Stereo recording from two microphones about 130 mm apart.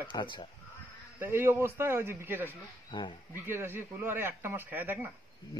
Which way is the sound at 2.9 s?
35° left (ahead or behind).